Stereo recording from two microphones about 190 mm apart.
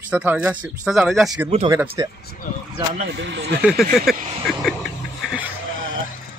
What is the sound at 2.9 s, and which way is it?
Speech, 65° right (ahead or behind).